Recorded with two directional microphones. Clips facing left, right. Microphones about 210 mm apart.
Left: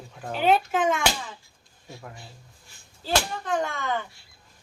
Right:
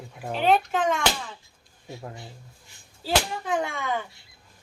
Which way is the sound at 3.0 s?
5° right (ahead or behind).